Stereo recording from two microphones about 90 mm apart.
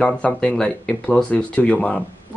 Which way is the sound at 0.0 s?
10° left (ahead or behind).